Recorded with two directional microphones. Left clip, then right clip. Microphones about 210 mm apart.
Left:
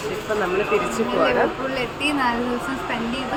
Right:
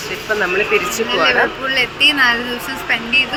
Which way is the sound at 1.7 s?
15° left (ahead or behind).